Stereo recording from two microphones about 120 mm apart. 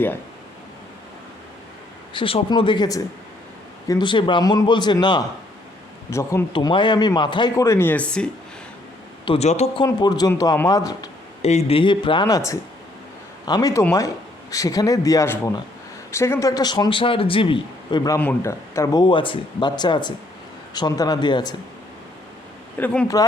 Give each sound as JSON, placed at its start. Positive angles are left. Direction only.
{"t": 2.1, "sound": "speech", "side_deg": 45}
{"t": 6.1, "sound": "speech", "side_deg": 25}
{"t": 6.5, "sound": "speech", "side_deg": 40}
{"t": 7.5, "sound": "speech", "side_deg": 25}
{"t": 9.2, "sound": "speech", "side_deg": 50}
{"t": 9.8, "sound": "speech", "side_deg": 35}
{"t": 11.4, "sound": "speech", "side_deg": 60}
{"t": 11.8, "sound": "speech", "side_deg": 45}
{"t": 12.3, "sound": "speech", "side_deg": 25}
{"t": 18.2, "sound": "speech", "side_deg": 20}
{"t": 19.0, "sound": "speech", "side_deg": 45}
{"t": 22.8, "sound": "speech", "side_deg": 10}